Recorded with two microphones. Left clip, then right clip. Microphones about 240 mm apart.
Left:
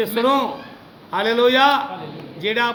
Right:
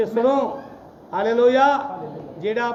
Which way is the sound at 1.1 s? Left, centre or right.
Left.